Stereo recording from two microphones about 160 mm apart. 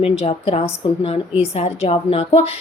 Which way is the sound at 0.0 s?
40° left (ahead or behind).